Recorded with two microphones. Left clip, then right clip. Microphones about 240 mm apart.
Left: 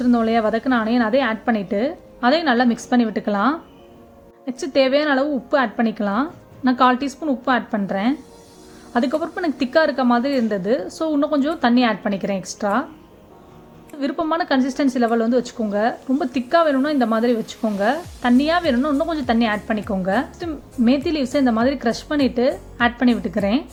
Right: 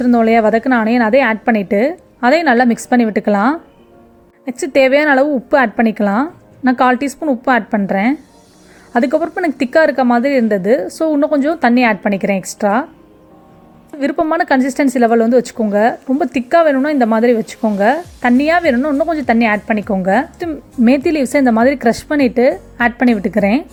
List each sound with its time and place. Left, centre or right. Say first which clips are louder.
0.0 s a woman's voice: right 7 dB; right
14.0 s a woman's voice: right 7 dB; right